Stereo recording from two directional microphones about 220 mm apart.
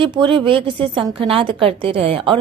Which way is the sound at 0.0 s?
20° right (ahead or behind).